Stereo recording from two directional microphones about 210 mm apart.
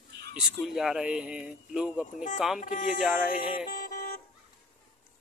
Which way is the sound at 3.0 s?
5° right (ahead or behind).